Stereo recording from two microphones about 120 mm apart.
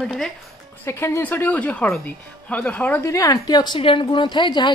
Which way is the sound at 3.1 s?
30° left (ahead or behind).